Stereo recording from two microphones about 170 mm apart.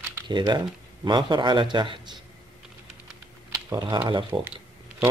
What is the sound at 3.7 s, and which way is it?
Speech, 25° right (ahead or behind).